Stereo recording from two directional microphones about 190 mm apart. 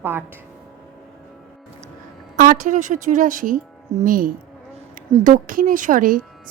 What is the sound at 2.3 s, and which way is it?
A woman's voice, 45° right (ahead or behind).